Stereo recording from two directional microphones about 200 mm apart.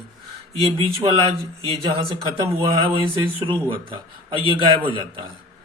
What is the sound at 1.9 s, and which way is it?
Speech, 30° right (ahead or behind).